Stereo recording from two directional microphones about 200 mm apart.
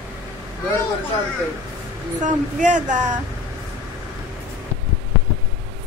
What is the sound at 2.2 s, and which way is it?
Speech, 40° right (ahead or behind).